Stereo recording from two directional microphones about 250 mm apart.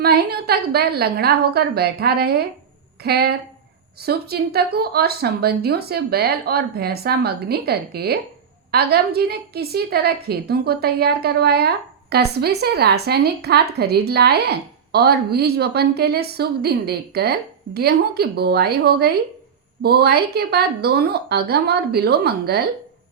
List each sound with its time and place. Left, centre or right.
0.0 s a woman's voice: right